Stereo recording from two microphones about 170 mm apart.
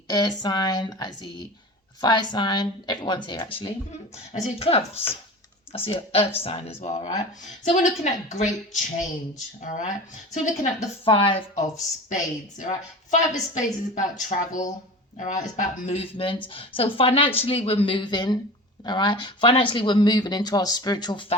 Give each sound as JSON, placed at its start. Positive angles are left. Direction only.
{"t": 0.1, "sound": "speech", "side_deg": 25}
{"t": 4.3, "sound": "a woman's voice", "side_deg": 40}
{"t": 9.6, "sound": "a woman's voice", "side_deg": 50}
{"t": 11.0, "sound": "a woman's voice", "side_deg": 35}
{"t": 11.5, "sound": "a woman's voice", "side_deg": 45}